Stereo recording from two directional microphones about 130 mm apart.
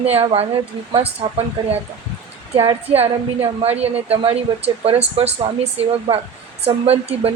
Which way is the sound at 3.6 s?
50° right (ahead or behind).